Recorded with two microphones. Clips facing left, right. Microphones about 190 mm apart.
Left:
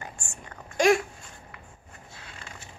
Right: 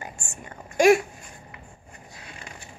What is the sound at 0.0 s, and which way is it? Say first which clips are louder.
Whispering: right 3 dB; 20° right (ahead or behind).